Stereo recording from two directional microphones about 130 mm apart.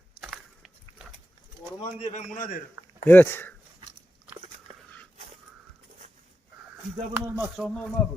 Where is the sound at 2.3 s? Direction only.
90° left.